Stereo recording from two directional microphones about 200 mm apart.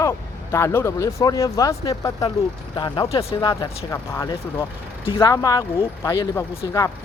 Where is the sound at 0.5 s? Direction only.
15° left (ahead or behind); by 3.5 s 30° left (ahead or behind).